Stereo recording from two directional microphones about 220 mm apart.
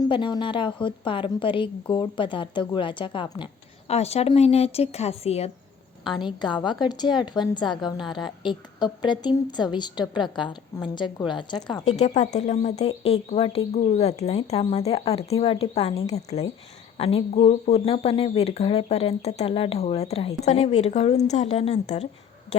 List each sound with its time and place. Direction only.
0.0 s a woman's voice: 20° left (ahead or behind)
11.9 s a woman's voice: 30° left (ahead or behind)